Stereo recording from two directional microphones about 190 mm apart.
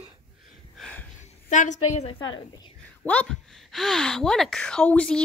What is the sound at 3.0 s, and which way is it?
A woman's voice, 5° left (ahead or behind).